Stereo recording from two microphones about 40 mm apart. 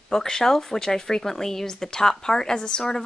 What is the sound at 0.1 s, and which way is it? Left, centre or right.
Speech, centre.